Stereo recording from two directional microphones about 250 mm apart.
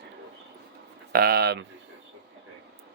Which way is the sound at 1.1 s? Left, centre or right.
Right.